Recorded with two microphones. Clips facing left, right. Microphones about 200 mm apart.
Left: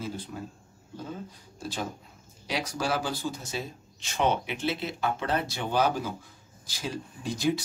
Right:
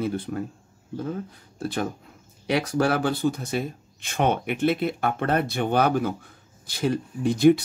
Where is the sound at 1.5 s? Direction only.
60° right (ahead or behind).